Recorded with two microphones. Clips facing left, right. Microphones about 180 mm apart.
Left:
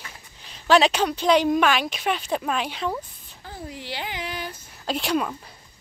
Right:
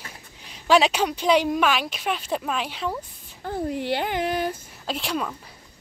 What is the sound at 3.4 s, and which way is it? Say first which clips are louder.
Speech: right 10 dB; 55° right (ahead or behind).